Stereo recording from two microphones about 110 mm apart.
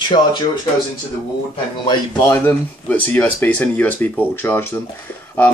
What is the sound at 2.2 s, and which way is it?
Speech, 15° left (ahead or behind).